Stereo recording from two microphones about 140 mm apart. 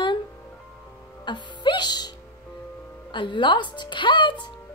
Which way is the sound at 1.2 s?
35° left (ahead or behind).